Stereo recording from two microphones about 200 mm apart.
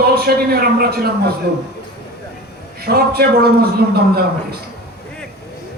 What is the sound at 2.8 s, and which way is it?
A man's voice, 50° right (ahead or behind).